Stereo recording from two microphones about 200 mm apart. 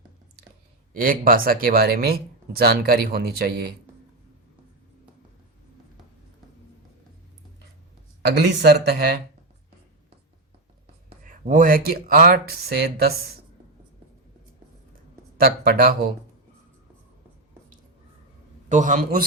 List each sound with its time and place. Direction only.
0.9 s speech: 45° right (ahead or behind)
8.3 s speech: 55° right (ahead or behind)
11.2 s speech: 40° right (ahead or behind)
15.4 s speech: 45° right (ahead or behind)
18.7 s a man's voice: 40° right (ahead or behind)